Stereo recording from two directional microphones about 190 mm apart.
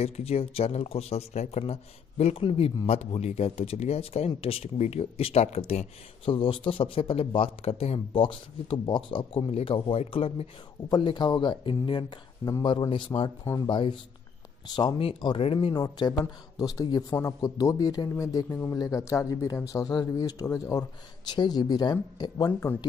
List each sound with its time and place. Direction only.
0.0 s speech: 35° left (ahead or behind)
13.4 s speech: 15° left (ahead or behind)
14.8 s speech: 25° left (ahead or behind)
22.5 s speech: 10° left (ahead or behind)